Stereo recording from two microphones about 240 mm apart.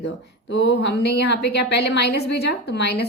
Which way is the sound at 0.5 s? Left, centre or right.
Left.